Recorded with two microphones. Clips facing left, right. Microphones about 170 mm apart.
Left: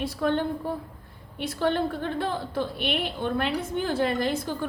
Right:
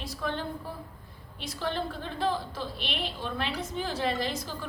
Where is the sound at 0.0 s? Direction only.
60° left (ahead or behind).